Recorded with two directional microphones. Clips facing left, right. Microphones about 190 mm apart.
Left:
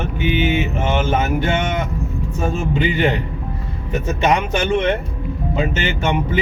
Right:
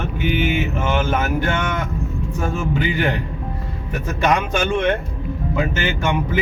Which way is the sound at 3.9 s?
20° left (ahead or behind).